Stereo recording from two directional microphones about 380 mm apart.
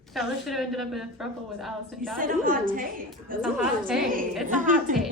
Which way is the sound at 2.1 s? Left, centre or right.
Right.